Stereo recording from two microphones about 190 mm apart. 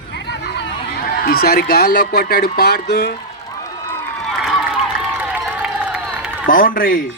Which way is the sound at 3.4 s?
20° left (ahead or behind).